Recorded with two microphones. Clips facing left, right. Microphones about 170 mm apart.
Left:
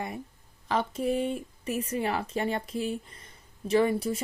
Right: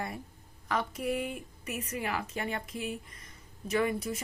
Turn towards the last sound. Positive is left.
turn(degrees=30)  # may be behind; listen again after turning